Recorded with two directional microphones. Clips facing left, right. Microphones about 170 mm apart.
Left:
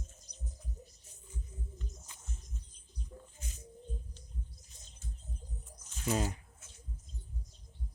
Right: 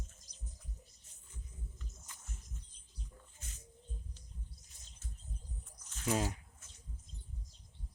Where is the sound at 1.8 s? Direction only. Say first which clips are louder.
Left 5 dB; 20° left (ahead or behind).